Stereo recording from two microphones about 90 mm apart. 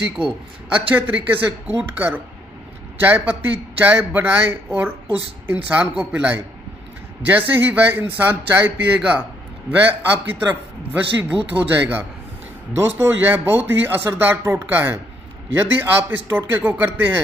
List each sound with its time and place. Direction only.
0.8 s a man's voice: 20° right (ahead or behind)